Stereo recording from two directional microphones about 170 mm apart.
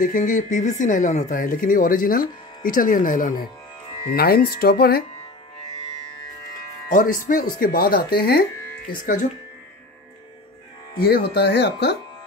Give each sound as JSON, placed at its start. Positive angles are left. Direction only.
{"t": 0.0, "sound": "speech", "side_deg": 50}
{"t": 4.1, "sound": "speech", "side_deg": 65}
{"t": 6.9, "sound": "speech", "side_deg": 50}
{"t": 9.0, "sound": "speech", "side_deg": 50}
{"t": 11.0, "sound": "speech", "side_deg": 65}